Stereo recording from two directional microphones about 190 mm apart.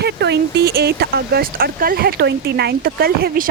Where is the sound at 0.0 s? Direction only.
60° right (ahead or behind).